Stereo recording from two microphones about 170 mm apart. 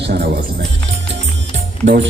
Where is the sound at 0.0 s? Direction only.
90° right.